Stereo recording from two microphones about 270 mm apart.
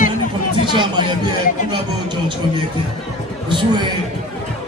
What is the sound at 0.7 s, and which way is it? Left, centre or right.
Speech, centre.